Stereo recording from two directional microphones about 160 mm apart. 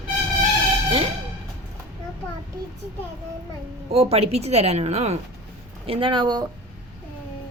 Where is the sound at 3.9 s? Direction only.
40° right (ahead or behind).